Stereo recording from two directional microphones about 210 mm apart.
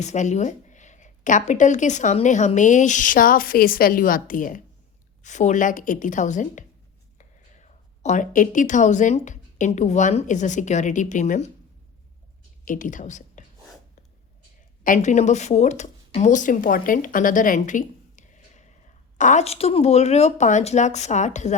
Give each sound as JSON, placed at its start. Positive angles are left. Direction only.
{"t": 0.0, "sound": "speech", "side_deg": 35}
{"t": 12.6, "sound": "a woman's voice", "side_deg": 40}
{"t": 14.8, "sound": "speech", "side_deg": 35}